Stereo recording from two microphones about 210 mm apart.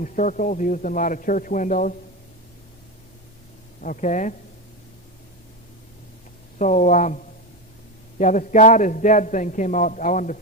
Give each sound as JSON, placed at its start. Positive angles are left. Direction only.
{"t": 0.0, "sound": "a man's voice", "side_deg": 35}
{"t": 3.8, "sound": "a man's voice", "side_deg": 40}
{"t": 6.6, "sound": "a man's voice", "side_deg": 35}
{"t": 8.2, "sound": "a man's voice", "side_deg": 35}